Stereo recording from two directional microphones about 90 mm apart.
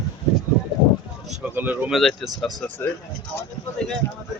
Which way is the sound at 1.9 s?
Centre (ahead or behind).